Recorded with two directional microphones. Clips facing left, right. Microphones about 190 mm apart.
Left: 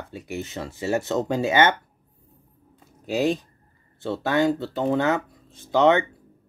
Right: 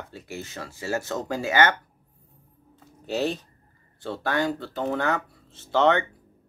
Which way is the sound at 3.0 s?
15° left (ahead or behind).